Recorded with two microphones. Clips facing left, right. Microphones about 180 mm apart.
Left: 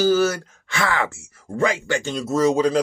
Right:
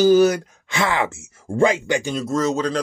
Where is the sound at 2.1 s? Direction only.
5° left (ahead or behind).